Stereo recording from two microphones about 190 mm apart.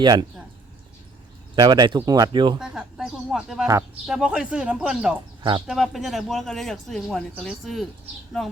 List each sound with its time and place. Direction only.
0.0 s speech: 25° right (ahead or behind)
1.5 s speech: 20° right (ahead or behind)
2.6 s speech: 5° right (ahead or behind)
5.4 s speech: 25° right (ahead or behind)
5.6 s speech: centre (ahead or behind)